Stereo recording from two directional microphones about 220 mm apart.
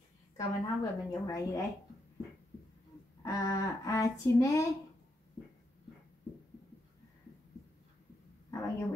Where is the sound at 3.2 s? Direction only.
15° left (ahead or behind).